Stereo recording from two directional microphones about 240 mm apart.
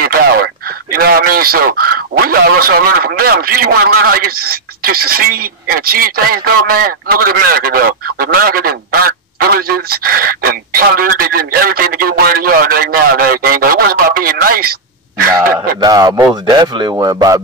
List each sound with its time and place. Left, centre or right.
0.0 s speech: right
15.8 s a man's voice: centre